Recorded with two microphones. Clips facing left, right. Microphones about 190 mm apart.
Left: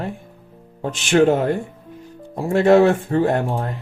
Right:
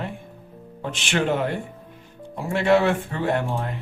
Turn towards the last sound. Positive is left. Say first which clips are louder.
# left 5 dB
turn(degrees=40)  # may be behind; listen again after turning